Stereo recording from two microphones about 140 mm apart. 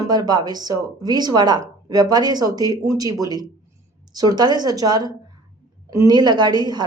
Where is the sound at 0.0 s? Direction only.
25° right (ahead or behind).